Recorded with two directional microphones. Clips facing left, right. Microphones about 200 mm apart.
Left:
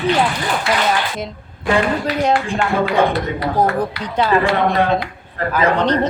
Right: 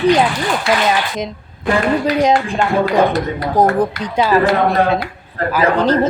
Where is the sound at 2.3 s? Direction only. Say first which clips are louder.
Right 2 dB; 40° right (ahead or behind).